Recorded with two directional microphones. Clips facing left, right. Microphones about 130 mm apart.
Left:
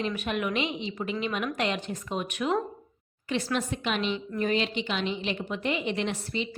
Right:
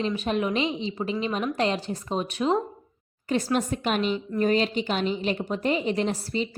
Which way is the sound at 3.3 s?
40° right (ahead or behind).